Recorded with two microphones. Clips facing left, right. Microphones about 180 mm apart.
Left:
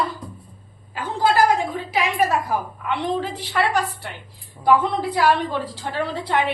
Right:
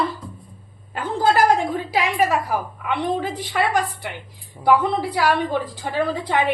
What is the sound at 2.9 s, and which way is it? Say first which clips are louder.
A woman's voice: right 1 dB; 15° right (ahead or behind).